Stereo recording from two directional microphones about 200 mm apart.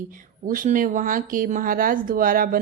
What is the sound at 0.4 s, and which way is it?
Speech, 40° right (ahead or behind).